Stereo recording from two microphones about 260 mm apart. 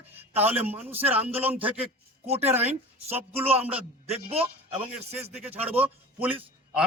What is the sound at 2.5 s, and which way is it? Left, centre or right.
A man's voice, centre.